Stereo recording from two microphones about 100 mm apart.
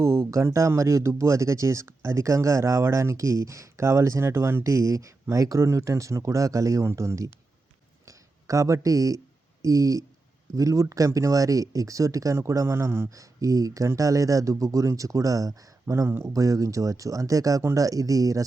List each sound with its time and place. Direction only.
0.0 s speech: 30° right (ahead or behind)
8.0 s a sound: 35° right (ahead or behind)
10.5 s speech: 35° right (ahead or behind)
16.0 s speech: 25° right (ahead or behind)
16.3 s speech: 35° right (ahead or behind)